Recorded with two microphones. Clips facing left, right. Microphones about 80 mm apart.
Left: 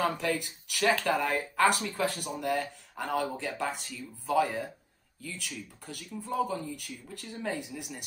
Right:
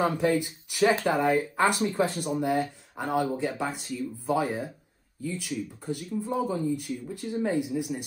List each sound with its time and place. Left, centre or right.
0.0 s speech: centre
2.5 s speech: centre